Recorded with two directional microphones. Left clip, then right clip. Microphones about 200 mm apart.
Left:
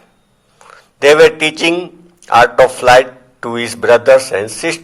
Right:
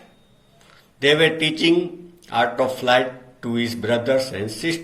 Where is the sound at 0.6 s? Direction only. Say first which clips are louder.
Left 9 dB; 50° left (ahead or behind).